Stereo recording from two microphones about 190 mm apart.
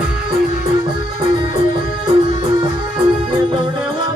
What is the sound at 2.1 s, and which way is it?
Music, 30° right (ahead or behind).